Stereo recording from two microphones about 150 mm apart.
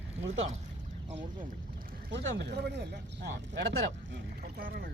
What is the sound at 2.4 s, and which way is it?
Speech, 90° right.